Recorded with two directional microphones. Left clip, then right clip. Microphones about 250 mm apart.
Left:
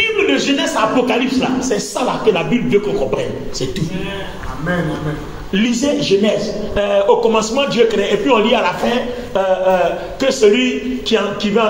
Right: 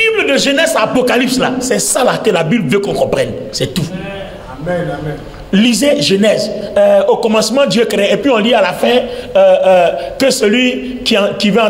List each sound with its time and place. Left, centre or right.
0.0 s a man's voice: right
5.5 s a man's voice: right